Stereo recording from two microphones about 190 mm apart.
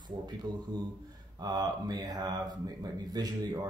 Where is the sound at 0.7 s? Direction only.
20° right (ahead or behind).